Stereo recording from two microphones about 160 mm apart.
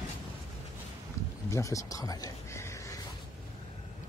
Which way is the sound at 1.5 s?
20° left (ahead or behind).